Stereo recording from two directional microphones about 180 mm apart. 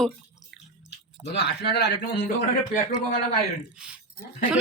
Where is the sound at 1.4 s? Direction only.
65° left (ahead or behind).